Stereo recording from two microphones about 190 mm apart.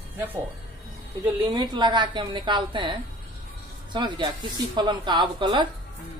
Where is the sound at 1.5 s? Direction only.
25° right (ahead or behind).